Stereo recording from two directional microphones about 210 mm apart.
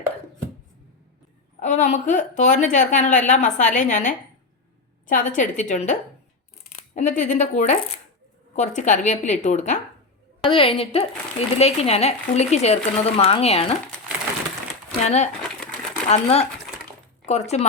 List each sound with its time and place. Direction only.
1.5 s a woman's voice: 35° left (ahead or behind)
15.0 s a woman's voice: 30° left (ahead or behind)